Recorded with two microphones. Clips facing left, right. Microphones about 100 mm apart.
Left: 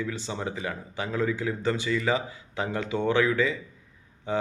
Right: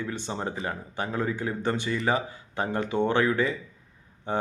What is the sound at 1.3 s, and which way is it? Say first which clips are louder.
A man's voice: left 1 dB; 50° right (ahead or behind).